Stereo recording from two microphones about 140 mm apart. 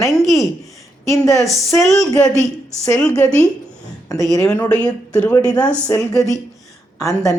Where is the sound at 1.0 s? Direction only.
20° left (ahead or behind).